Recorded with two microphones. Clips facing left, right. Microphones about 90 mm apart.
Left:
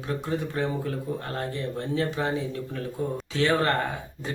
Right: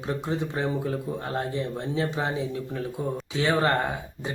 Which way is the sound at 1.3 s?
15° right (ahead or behind).